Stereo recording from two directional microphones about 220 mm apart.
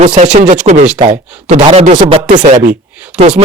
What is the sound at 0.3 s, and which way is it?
Speech, 35° right (ahead or behind).